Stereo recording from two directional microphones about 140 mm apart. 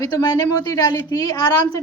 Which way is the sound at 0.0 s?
30° left (ahead or behind).